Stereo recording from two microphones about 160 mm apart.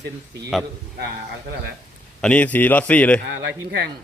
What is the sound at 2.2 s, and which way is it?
A man's voice, 10° left (ahead or behind).